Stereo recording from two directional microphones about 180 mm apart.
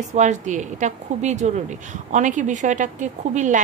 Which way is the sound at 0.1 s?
40° right (ahead or behind).